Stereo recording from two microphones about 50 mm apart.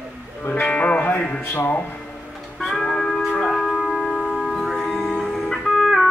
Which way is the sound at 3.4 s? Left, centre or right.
Centre.